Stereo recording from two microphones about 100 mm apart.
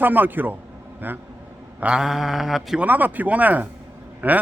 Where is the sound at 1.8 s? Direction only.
5° right (ahead or behind).